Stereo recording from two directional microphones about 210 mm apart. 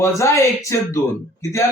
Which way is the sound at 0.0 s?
15° left (ahead or behind).